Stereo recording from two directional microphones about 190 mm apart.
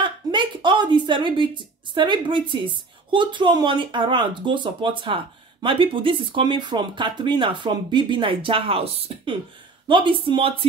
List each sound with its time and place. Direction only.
0.3 s a woman's voice: 25° right (ahead or behind)